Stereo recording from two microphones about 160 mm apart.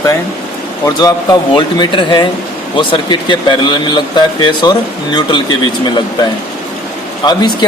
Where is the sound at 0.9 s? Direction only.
25° left (ahead or behind).